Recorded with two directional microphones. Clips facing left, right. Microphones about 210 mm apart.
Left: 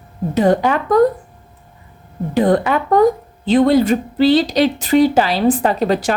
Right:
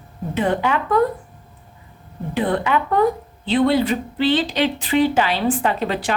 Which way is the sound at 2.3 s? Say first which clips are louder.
Left 5 dB; 40° left (ahead or behind).